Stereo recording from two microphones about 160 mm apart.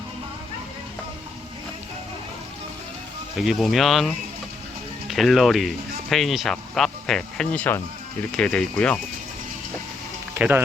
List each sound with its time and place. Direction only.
3.3 s speech: centre (ahead or behind)
10.3 s speech: 10° right (ahead or behind)